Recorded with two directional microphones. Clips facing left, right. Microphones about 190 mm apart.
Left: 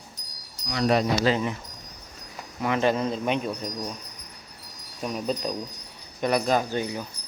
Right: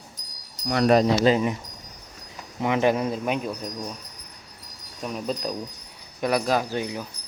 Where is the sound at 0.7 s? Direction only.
55° right (ahead or behind).